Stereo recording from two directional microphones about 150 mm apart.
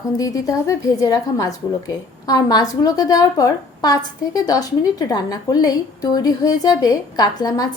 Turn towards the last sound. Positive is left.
turn(degrees=25)  # may be behind; listen again after turning